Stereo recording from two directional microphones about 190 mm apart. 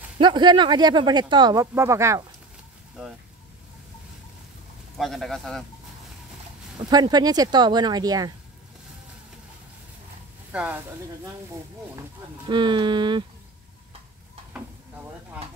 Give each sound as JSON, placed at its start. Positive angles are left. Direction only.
{"t": 0.2, "sound": "speech", "side_deg": -25}
{"t": 4.9, "sound": "speech", "side_deg": 0}
{"t": 6.8, "sound": "speech", "side_deg": -20}
{"t": 10.5, "sound": "speech", "side_deg": -5}
{"t": 12.4, "sound": "speech", "side_deg": -25}